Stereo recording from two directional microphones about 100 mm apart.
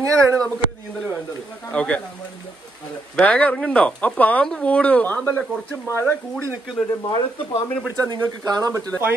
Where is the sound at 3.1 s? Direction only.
10° left (ahead or behind).